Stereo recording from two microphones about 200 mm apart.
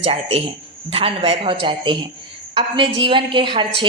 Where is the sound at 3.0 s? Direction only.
25° right (ahead or behind).